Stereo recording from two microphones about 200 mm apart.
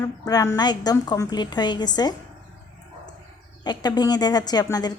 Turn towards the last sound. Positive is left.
turn(degrees=20)  # may be behind; listen again after turning